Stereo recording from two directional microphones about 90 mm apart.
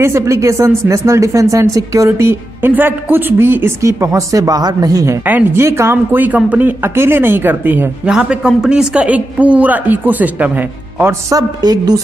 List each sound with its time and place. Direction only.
0.0 s speech: 30° right (ahead or behind)
5.2 s speech: 20° right (ahead or behind)
5.6 s speech: 30° right (ahead or behind)
8.1 s a man's voice: 10° right (ahead or behind); by 11.3 s 30° right (ahead or behind)
11.3 s a woman's voice: 45° right (ahead or behind)